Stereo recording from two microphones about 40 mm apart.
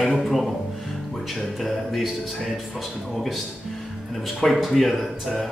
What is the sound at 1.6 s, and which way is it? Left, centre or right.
Speech, centre.